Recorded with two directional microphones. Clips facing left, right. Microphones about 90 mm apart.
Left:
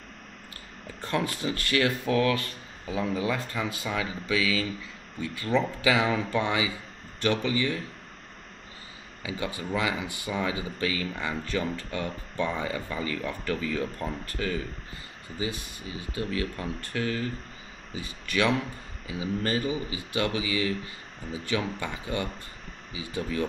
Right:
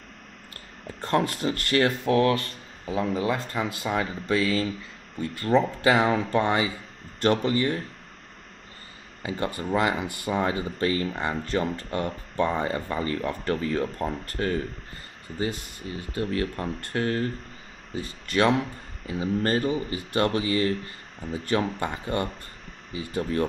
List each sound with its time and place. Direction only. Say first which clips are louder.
0.8 s speech: right 5 dB; 40° right (ahead or behind)
9.2 s speech: right 4 dB; 50° right (ahead or behind)
18.3 s speech: right 4 dB; 40° right (ahead or behind)